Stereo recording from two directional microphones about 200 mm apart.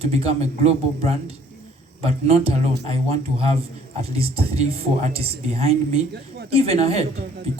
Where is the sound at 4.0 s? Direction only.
30° right (ahead or behind).